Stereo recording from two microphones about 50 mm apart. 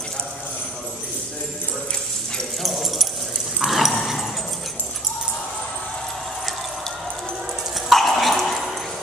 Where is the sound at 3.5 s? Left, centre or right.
Centre.